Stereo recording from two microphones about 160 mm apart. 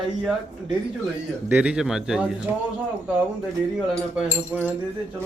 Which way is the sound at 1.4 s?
10° right (ahead or behind).